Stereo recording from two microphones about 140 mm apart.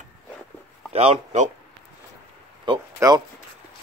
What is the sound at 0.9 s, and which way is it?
Speech, 55° right (ahead or behind).